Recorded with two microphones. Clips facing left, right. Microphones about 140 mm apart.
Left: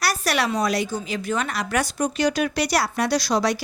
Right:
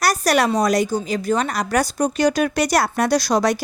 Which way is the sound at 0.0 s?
45° right (ahead or behind).